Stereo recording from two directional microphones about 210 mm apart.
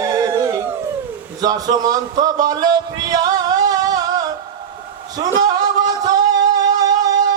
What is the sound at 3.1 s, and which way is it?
Music, 20° right (ahead or behind).